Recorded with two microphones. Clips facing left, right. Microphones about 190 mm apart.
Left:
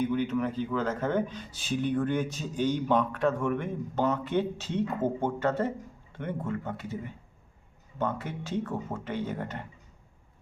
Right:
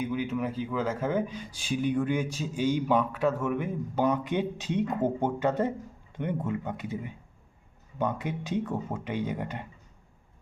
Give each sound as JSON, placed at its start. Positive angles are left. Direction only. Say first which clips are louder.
{"t": 0.0, "sound": "speech", "louder": "left 2 dB", "side_deg": -10}